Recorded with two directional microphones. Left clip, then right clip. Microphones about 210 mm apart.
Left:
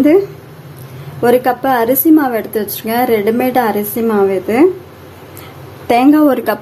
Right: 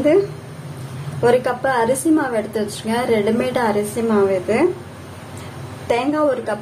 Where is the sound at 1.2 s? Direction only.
40° left (ahead or behind).